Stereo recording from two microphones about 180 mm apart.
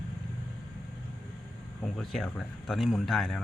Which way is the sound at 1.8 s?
Centre (ahead or behind).